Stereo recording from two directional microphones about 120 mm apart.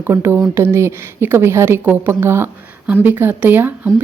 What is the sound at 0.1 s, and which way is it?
A woman's voice, 20° right (ahead or behind).